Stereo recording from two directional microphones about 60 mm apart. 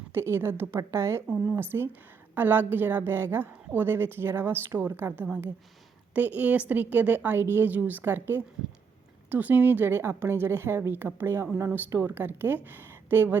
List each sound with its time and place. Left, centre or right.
0.1 s a woman's voice: right
6.1 s a woman's voice: right
12.9 s a sound: right